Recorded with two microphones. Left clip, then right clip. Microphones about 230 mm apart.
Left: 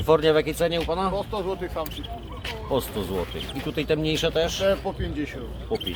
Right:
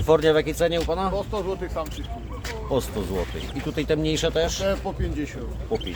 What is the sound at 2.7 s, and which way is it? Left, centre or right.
Speech, centre.